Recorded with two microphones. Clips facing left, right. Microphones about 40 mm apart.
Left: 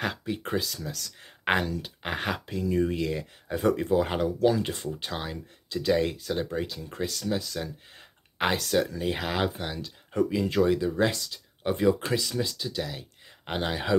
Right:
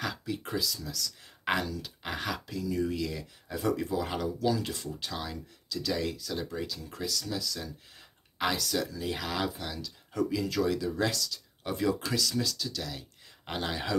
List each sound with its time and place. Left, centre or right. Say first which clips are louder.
0.0 s speech: left 4 dB; left